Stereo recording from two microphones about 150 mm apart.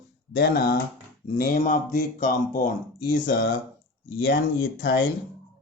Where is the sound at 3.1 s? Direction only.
70° left (ahead or behind).